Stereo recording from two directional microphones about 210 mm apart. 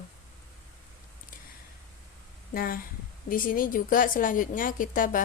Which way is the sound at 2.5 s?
45° left (ahead or behind).